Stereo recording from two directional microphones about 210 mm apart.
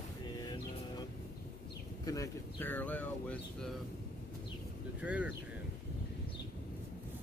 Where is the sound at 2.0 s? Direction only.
15° left (ahead or behind).